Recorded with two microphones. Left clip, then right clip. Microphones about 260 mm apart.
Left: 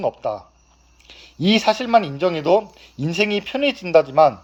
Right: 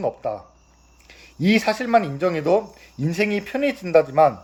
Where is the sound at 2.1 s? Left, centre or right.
Centre.